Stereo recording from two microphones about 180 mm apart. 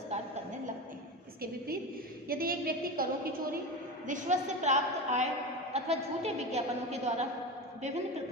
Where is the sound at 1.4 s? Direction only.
55° right (ahead or behind).